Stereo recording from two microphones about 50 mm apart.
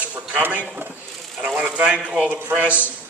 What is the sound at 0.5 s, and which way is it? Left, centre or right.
A man's voice, right.